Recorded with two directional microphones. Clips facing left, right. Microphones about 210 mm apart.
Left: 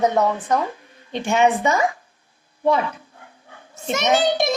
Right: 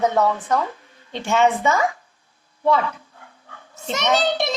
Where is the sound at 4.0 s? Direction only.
15° left (ahead or behind).